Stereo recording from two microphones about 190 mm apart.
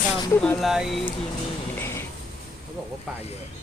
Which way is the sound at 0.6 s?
Centre (ahead or behind).